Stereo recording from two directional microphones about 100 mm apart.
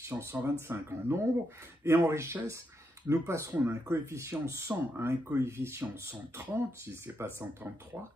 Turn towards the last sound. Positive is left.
turn(degrees=-25)  # may be behind; listen again after turning